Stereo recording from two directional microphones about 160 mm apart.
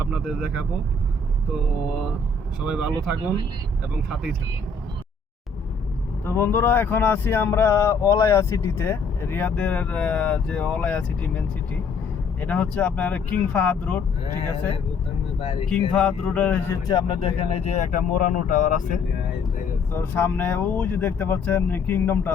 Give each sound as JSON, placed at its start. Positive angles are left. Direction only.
{"t": 0.0, "sound": "speech", "side_deg": -5}
{"t": 2.6, "sound": "speech", "side_deg": -5}
{"t": 6.2, "sound": "speech", "side_deg": 15}
{"t": 15.4, "sound": "speech", "side_deg": 35}
{"t": 15.7, "sound": "speech", "side_deg": 5}
{"t": 16.8, "sound": "speech", "side_deg": 30}
{"t": 19.9, "sound": "speech", "side_deg": 15}